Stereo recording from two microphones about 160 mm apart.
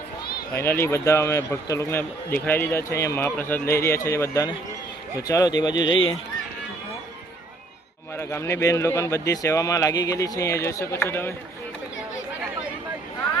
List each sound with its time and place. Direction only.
0.5 s a man's voice: 15° left (ahead or behind)
8.1 s a man's voice: 15° left (ahead or behind)